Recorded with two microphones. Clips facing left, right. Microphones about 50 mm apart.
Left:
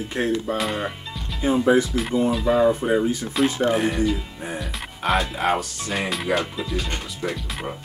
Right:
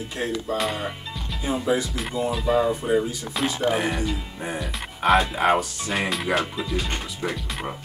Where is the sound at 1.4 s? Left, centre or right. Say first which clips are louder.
Left 6 dB; left.